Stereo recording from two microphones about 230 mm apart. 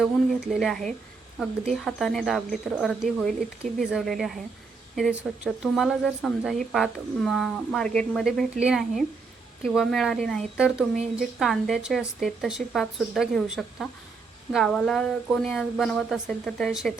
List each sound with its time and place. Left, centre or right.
0.0 s speech: centre